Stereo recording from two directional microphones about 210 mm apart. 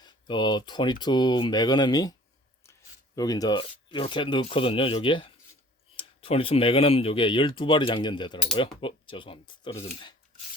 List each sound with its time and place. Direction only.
0.0 s speech: 20° left (ahead or behind)
2.6 s a sound: 15° left (ahead or behind)
3.2 s speech: 15° left (ahead or behind)